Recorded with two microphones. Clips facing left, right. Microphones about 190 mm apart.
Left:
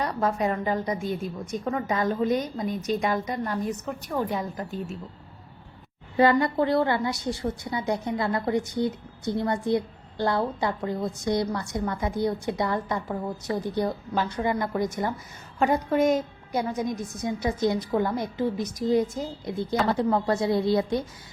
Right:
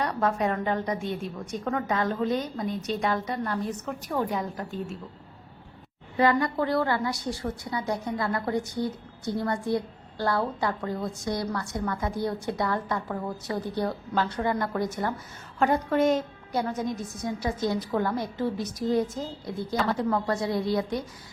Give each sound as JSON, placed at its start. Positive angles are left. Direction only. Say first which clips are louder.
{"t": 0.0, "sound": "a woman's voice", "louder": "even", "side_deg": 5}
{"t": 3.8, "sound": "a woman's voice", "louder": "even", "side_deg": 0}
{"t": 6.1, "sound": "a woman's voice", "louder": "left 3 dB", "side_deg": 30}
{"t": 19.8, "sound": "a woman's voice", "louder": "left 2 dB", "side_deg": 25}